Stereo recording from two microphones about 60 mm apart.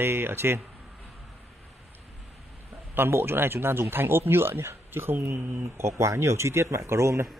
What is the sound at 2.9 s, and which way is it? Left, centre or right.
A man's voice, right.